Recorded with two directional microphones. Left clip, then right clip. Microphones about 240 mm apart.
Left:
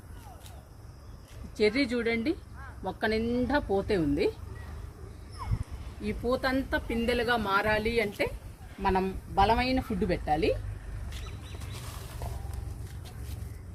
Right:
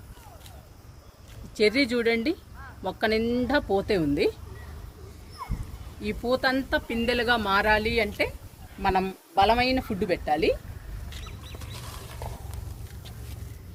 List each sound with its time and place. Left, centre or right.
1.5 s a woman's voice: right
6.0 s speech: right